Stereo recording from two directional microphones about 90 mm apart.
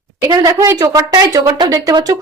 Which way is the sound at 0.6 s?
40° right (ahead or behind).